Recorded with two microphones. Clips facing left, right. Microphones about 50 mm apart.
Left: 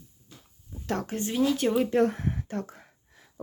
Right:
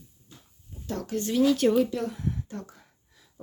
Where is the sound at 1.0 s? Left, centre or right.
Left.